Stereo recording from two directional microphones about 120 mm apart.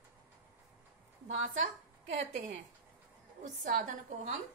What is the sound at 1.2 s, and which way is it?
Speech, 90° right.